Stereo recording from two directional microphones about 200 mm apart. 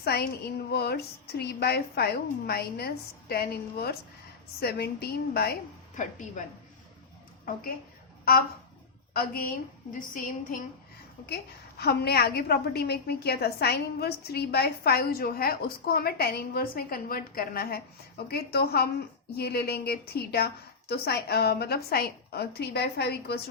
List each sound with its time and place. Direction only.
0.0 s a woman's voice: 55° left (ahead or behind)
6.0 s a woman's voice: 40° left (ahead or behind)
8.2 s a woman's voice: 50° left (ahead or behind)
11.8 s a woman's voice: 55° left (ahead or behind)